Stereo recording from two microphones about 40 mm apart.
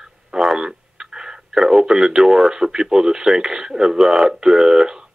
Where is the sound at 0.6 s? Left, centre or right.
Centre.